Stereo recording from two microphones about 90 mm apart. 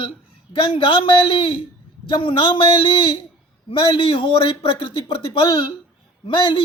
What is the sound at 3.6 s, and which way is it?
Speech, 75° left (ahead or behind).